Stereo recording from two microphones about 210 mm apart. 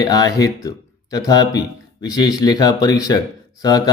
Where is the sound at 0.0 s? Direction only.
20° left (ahead or behind).